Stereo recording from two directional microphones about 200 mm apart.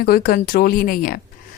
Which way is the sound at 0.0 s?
45° left (ahead or behind).